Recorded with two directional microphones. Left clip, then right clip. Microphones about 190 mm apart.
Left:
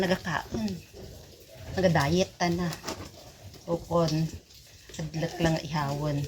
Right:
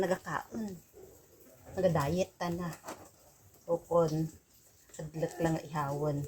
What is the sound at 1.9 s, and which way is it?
Speech, 15° right (ahead or behind).